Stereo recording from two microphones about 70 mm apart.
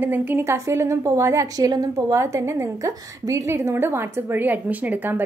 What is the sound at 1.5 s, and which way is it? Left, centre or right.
Speech, right.